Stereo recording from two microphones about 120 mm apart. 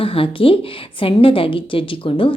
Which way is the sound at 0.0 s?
50° left (ahead or behind).